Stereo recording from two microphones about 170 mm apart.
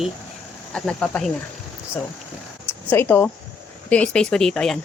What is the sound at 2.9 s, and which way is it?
Speech, 10° left (ahead or behind).